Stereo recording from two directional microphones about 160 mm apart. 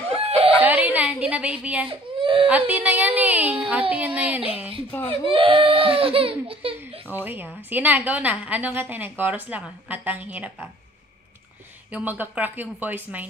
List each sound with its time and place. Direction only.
0.2 s whimper: 40° right (ahead or behind)
0.6 s a sound: 10° right (ahead or behind)
1.9 s speech: 35° right (ahead or behind)
2.4 s a woman's voice: 10° right (ahead or behind)
5.2 s speech: 35° right (ahead or behind)
7.1 s a woman's voice: 10° right (ahead or behind)
11.9 s a woman's voice: 10° right (ahead or behind)